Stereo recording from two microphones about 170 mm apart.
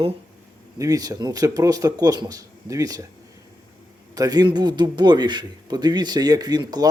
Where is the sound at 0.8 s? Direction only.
20° right (ahead or behind).